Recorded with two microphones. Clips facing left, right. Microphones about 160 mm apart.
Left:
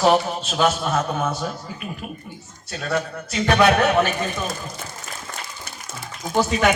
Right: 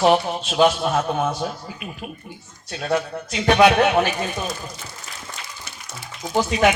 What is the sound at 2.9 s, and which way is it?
A man's voice, 45° left (ahead or behind).